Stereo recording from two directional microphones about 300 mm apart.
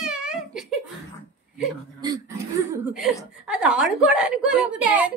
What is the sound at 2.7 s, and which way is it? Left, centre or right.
Speech, centre.